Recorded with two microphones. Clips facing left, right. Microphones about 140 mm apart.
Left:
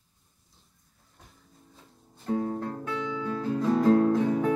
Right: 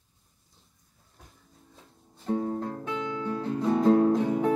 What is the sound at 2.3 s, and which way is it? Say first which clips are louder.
Guitar: even; 25° right (ahead or behind).